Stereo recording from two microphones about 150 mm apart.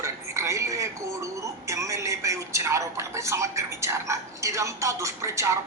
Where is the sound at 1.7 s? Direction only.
20° right (ahead or behind).